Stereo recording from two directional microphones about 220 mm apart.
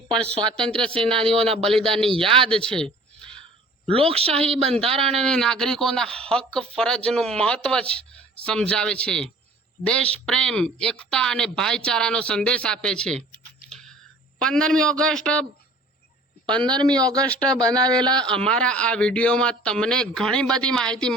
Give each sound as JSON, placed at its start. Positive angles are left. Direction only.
{"t": 0.2, "sound": "speech", "side_deg": 5}
{"t": 0.8, "sound": "a man's voice", "side_deg": -25}
{"t": 1.7, "sound": "speech", "side_deg": 0}
{"t": 2.0, "sound": "a man's voice", "side_deg": -25}
{"t": 2.6, "sound": "a sound", "side_deg": 5}
{"t": 3.8, "sound": "a man's voice", "side_deg": -25}
{"t": 5.1, "sound": "speech", "side_deg": 0}
{"t": 13.7, "sound": "a sound", "side_deg": 0}
{"t": 14.3, "sound": "speech", "side_deg": 5}
{"t": 16.5, "sound": "a man's voice", "side_deg": -20}
{"t": 17.2, "sound": "speech", "side_deg": 5}